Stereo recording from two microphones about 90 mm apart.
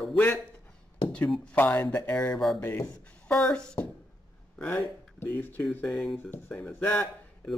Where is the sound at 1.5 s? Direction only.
20° left (ahead or behind).